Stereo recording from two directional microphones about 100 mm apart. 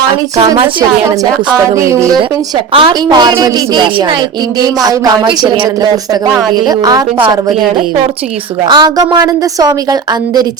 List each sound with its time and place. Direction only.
0.3 s a woman's voice: 40° right (ahead or behind)
1.7 s a woman's voice: 30° right (ahead or behind)
2.7 s a woman's voice: 55° right (ahead or behind)
4.6 s a woman's voice: 40° right (ahead or behind)
8.6 s a woman's voice: 45° right (ahead or behind)